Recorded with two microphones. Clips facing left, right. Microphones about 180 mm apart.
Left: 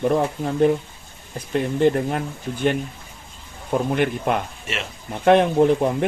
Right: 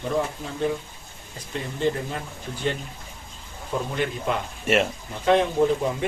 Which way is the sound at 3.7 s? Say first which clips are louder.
Left 6 dB; 60° left (ahead or behind).